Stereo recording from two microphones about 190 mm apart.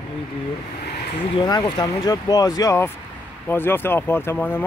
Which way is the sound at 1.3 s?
20° left (ahead or behind).